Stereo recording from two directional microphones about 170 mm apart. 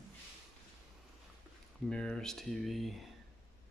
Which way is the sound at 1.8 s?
5° left (ahead or behind).